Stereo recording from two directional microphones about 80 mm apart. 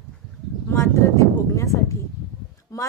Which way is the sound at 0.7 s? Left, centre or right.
Left.